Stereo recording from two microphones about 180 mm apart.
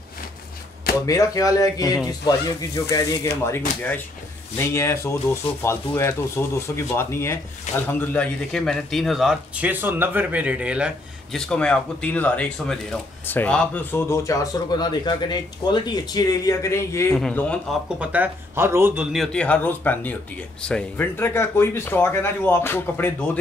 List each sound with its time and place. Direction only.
1.0 s speech: 20° left (ahead or behind); by 10.9 s 5° right (ahead or behind)
11.3 s speech: 5° left (ahead or behind)
17.9 s speech: 10° right (ahead or behind)
19.1 s speech: 5° left (ahead or behind)